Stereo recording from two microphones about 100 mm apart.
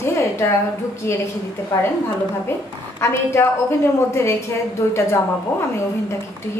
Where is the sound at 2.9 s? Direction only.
25° left (ahead or behind).